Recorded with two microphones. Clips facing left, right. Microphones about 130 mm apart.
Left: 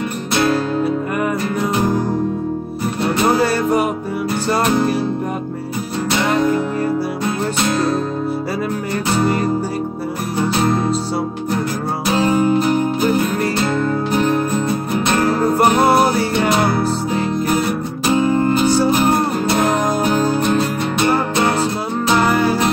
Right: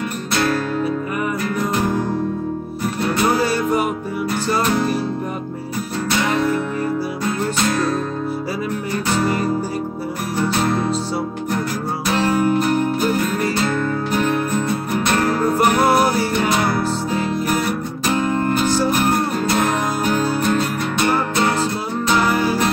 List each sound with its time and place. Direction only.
0.4 s music: 20° left (ahead or behind)
12.1 s music: 20° left (ahead or behind)
18.1 s music: 15° left (ahead or behind)